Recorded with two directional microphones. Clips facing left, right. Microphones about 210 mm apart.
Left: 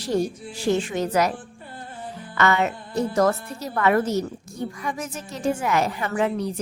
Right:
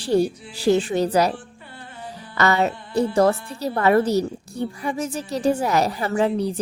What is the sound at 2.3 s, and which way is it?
A woman's voice, 35° right (ahead or behind).